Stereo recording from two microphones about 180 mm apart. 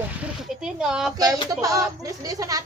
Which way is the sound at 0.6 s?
5° right (ahead or behind).